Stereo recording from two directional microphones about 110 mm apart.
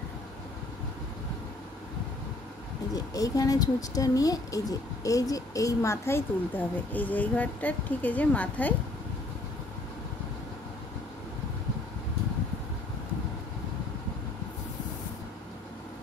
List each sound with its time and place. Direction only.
2.9 s speech: 35° left (ahead or behind); by 8.7 s 15° left (ahead or behind)